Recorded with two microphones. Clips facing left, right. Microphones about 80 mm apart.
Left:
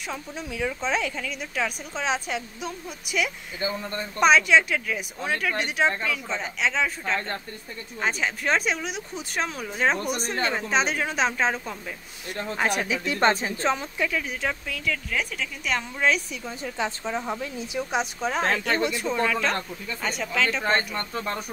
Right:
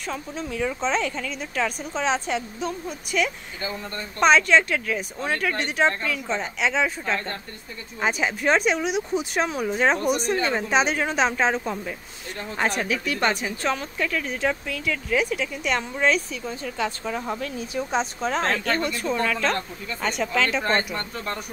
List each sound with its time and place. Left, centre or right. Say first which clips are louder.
0.0 s a woman's voice: right 3 dB; centre
12.5 s speech: right 1 dB; centre; by 13.8 s left
13.9 s speech: right 1 dB; centre
17.2 s a woman's voice: right 1 dB; centre